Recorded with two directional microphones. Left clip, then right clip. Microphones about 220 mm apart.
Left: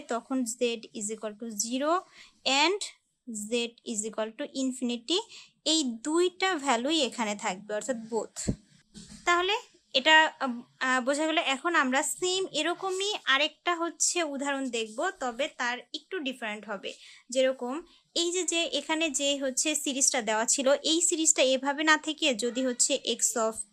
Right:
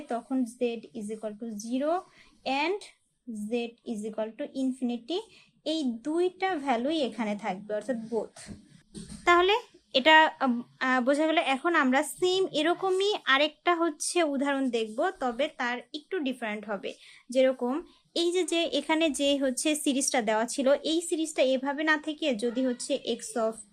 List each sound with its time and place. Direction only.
0.1 s a woman's voice: 25° left (ahead or behind)
9.2 s speech: centre (ahead or behind); by 23.6 s 15° left (ahead or behind)